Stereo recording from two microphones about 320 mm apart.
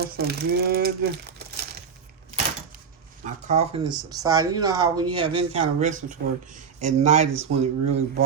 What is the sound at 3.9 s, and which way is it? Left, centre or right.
Speech, centre.